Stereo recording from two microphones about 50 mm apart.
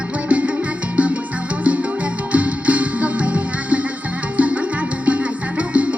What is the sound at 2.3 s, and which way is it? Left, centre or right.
Music, right.